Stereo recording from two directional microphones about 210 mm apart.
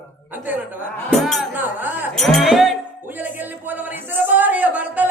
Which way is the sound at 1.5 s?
10° right (ahead or behind).